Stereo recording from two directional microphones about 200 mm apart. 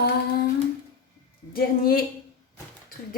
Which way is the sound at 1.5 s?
50° left (ahead or behind).